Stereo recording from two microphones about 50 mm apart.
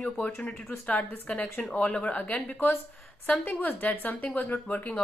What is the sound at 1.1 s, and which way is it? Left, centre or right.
A woman's voice, left.